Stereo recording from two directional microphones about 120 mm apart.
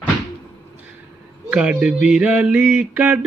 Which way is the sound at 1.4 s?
10° right (ahead or behind).